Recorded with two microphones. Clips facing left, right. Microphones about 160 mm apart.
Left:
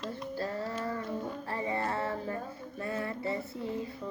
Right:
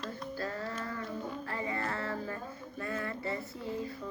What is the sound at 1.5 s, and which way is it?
Child singing, 30° left (ahead or behind).